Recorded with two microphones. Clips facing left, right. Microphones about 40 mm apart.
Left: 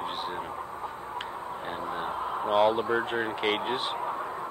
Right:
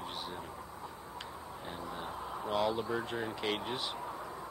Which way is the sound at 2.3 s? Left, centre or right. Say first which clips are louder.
Left 9 dB; left.